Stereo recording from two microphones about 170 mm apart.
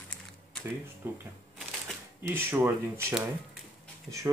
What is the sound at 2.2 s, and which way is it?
Speech, 10° right (ahead or behind).